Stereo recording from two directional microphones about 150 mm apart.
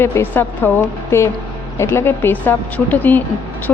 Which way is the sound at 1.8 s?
15° left (ahead or behind).